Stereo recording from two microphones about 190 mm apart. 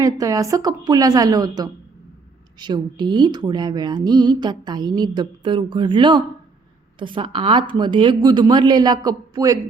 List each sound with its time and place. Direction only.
0.0 s speech: 20° right (ahead or behind)